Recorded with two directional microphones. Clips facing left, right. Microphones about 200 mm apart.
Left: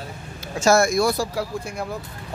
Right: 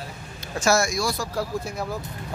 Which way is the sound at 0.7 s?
55° left (ahead or behind).